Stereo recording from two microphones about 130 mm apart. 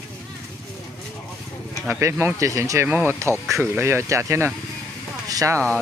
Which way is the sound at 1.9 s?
20° right (ahead or behind).